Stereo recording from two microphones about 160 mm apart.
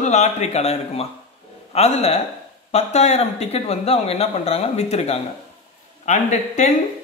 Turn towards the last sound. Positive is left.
turn(degrees=50)  # may be behind; listen again after turning